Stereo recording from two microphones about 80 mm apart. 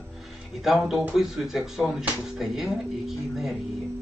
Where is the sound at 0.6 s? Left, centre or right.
Centre.